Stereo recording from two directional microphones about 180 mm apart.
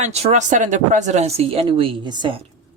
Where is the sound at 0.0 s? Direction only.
35° right (ahead or behind).